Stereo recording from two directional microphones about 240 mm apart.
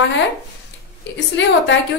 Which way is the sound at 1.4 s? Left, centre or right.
Left.